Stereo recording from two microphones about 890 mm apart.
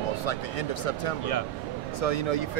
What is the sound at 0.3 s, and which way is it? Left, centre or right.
Speech, left.